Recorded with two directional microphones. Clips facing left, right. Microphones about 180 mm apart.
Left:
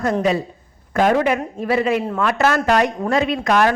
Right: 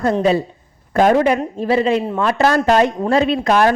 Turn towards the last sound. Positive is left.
turn(degrees=-30)  # may be behind; listen again after turning